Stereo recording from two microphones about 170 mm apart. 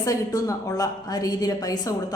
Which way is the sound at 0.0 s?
20° left (ahead or behind).